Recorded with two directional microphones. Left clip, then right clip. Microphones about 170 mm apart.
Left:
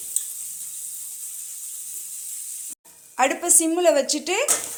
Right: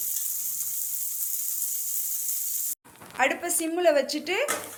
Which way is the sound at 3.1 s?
30° left (ahead or behind).